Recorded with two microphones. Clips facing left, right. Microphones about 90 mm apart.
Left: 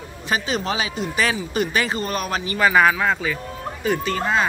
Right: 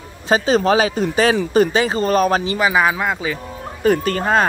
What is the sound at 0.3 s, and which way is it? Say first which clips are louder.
A man's voice: right 9 dB; 40° right (ahead or behind).